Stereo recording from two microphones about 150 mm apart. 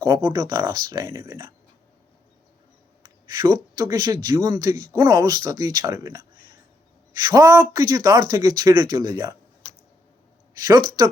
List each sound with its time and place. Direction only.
0.3 s speech: 20° right (ahead or behind)
3.0 s speech: 30° right (ahead or behind)
10.5 s speech: 25° right (ahead or behind)